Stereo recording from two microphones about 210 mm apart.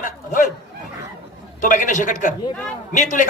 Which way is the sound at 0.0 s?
40° left (ahead or behind).